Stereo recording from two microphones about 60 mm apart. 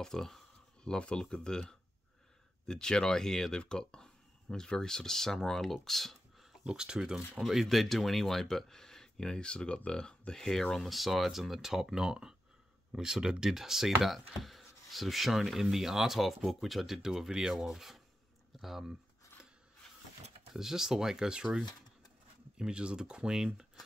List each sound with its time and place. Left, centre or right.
0.0 s speech: centre
6.6 s speech: centre
7.3 s speech: centre
20.5 s speech: centre
22.6 s speech: centre